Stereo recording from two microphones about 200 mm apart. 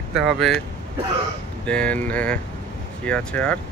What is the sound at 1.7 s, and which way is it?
Speech, 5° left (ahead or behind).